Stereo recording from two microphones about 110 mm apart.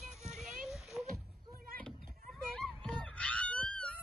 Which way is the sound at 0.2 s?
5° right (ahead or behind).